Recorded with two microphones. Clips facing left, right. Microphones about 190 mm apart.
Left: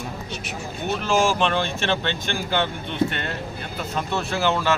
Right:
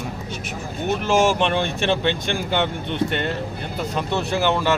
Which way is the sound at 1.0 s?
15° right (ahead or behind).